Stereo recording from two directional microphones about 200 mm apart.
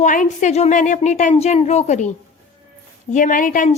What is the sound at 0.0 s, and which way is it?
A woman's voice, 40° left (ahead or behind).